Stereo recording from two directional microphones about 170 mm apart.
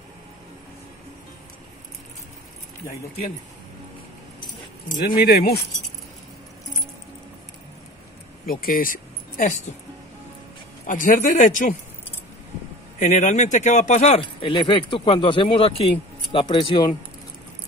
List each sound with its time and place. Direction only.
5.0 s speech: 65° left (ahead or behind)
8.5 s speech: 55° left (ahead or behind)
10.9 s speech: 50° left (ahead or behind)
13.0 s speech: 45° left (ahead or behind); by 16.9 s 30° left (ahead or behind)